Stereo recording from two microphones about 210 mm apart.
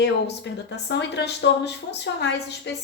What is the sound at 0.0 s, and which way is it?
Speech, 55° left (ahead or behind).